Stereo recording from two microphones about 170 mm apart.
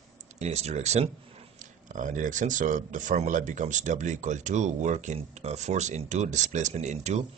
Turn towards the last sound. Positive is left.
turn(degrees=-40)  # may be behind; listen again after turning